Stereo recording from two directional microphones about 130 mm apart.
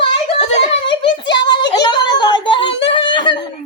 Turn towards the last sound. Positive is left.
turn(degrees=35)  # may be behind; listen again after turning